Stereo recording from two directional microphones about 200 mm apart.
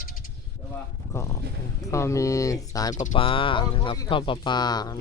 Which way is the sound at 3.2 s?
25° left (ahead or behind).